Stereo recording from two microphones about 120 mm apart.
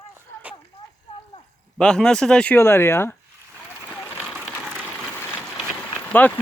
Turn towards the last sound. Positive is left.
turn(degrees=15)  # may be behind; listen again after turning